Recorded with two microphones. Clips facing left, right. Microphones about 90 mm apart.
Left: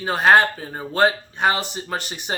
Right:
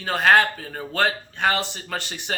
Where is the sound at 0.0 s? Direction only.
15° left (ahead or behind).